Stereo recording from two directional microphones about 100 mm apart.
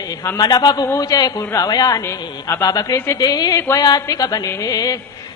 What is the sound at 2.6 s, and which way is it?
Speech, 35° left (ahead or behind).